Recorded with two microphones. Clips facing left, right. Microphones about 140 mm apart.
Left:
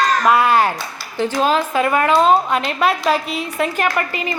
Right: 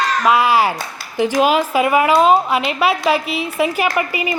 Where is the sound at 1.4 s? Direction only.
10° right (ahead or behind).